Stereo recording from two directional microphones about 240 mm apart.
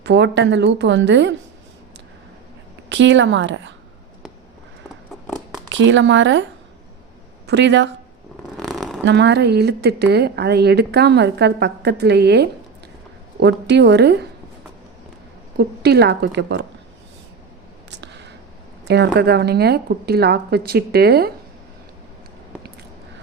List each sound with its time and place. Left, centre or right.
0.0 s a woman's voice: right
2.9 s a woman's voice: right
5.6 s a woman's voice: right
7.4 s speech: right
8.5 s a sound: centre
9.0 s a woman's voice: right
15.5 s a woman's voice: right
17.9 s a sound: right
18.9 s a woman's voice: right